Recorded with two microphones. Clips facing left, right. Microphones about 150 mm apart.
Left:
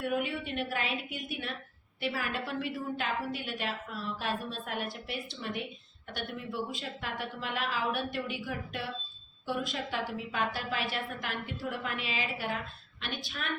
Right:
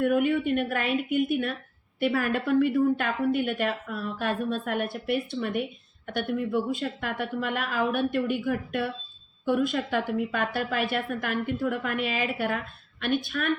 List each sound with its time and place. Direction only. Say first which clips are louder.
0.0 s a woman's voice: right 9 dB; 55° right (ahead or behind)